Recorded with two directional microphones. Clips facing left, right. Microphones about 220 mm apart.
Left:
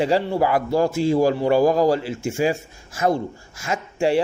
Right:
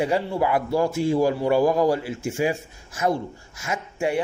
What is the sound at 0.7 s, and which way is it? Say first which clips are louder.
A man's voice: left 3 dB; 90° left.